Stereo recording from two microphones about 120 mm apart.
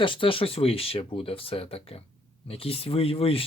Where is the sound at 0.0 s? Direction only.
45° left (ahead or behind).